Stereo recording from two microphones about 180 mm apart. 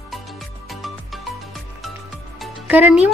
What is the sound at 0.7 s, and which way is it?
Music, centre (ahead or behind).